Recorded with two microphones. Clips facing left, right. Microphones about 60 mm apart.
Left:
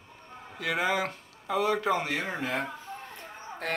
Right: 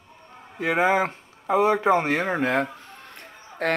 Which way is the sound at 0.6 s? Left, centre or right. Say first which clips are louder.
Right 7 dB; right.